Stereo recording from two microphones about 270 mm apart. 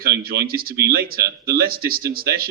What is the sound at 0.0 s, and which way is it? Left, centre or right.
Speech, right.